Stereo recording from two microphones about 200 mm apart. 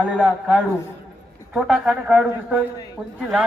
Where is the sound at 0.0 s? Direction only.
Centre (ahead or behind).